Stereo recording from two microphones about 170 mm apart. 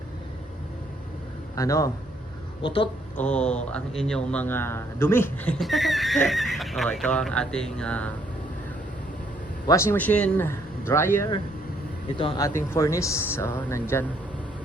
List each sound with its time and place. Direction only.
1.5 s a man's voice: 20° left (ahead or behind)
2.6 s a woman's voice: 30° left (ahead or behind)
3.2 s a man's voice: 5° left (ahead or behind)
5.5 s speech: centre (ahead or behind)
9.6 s a man's voice: 15° left (ahead or behind)
12.4 s a man's voice: 15° left (ahead or behind)